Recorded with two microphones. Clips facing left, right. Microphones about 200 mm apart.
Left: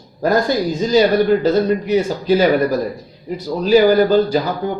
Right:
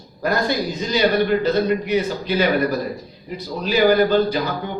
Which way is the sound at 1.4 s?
45° left (ahead or behind).